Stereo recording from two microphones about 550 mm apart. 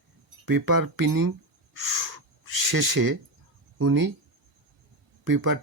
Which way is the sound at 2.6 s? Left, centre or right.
Right.